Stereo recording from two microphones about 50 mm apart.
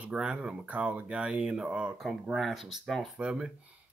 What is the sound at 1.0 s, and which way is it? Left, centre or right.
Speech, centre.